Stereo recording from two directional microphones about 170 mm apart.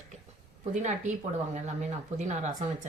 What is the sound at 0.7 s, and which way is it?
Speech, 45° right (ahead or behind).